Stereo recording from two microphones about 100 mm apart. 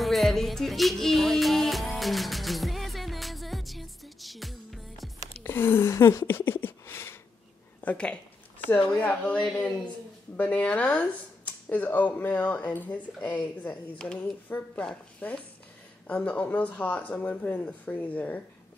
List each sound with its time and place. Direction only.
0.0 s music: centre (ahead or behind)
5.4 s a sound: 25° left (ahead or behind)
7.8 s speech: 15° left (ahead or behind)